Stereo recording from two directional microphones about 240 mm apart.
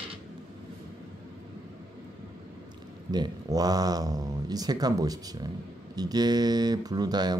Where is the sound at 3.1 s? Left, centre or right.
Centre.